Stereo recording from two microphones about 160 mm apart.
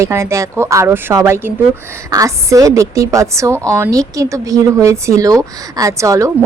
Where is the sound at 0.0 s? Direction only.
15° right (ahead or behind).